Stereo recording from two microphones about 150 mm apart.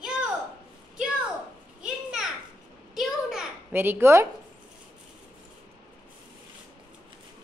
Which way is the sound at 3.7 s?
15° right (ahead or behind).